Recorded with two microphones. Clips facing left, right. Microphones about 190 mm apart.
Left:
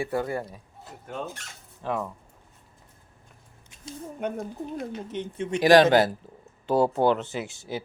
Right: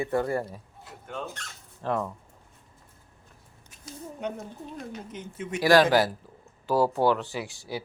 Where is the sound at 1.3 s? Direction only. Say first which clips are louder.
Right 1 dB; 5° left (ahead or behind).